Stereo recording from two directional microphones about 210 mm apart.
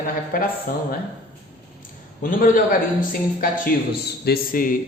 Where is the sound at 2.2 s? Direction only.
40° left (ahead or behind).